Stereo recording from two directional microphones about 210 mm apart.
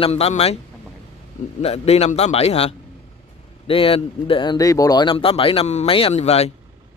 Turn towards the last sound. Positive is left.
turn(degrees=30)  # may be behind; listen again after turning